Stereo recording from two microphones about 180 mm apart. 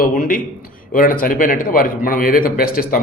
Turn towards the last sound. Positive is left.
turn(degrees=55)  # may be behind; listen again after turning